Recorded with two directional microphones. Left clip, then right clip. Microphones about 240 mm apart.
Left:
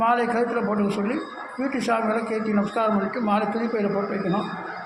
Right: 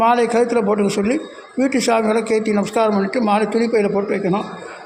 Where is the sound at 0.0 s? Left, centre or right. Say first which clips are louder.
Right 6 dB; right.